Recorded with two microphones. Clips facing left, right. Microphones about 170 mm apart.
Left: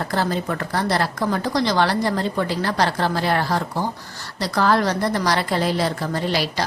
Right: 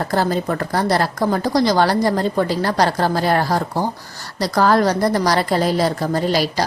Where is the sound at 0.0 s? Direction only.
40° right (ahead or behind).